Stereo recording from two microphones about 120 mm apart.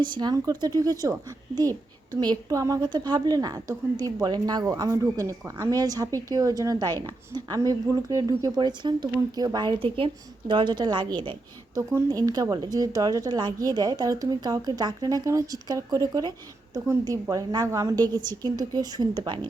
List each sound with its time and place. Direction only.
0.0 s a woman's voice: 40° right (ahead or behind)
2.1 s a woman's voice: 30° right (ahead or behind)
9.8 s a woman's voice: 50° right (ahead or behind)
11.8 s a woman's voice: 25° right (ahead or behind); by 19.4 s 40° right (ahead or behind)